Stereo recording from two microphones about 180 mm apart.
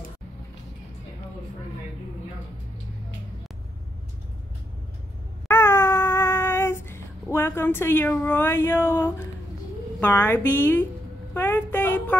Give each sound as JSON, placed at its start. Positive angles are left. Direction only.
{"t": 5.5, "sound": "a sound", "side_deg": 15}
{"t": 9.9, "sound": "a woman's voice", "side_deg": 10}
{"t": 11.3, "sound": "child singing", "side_deg": 10}